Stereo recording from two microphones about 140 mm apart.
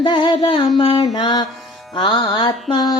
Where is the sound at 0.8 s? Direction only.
40° left (ahead or behind).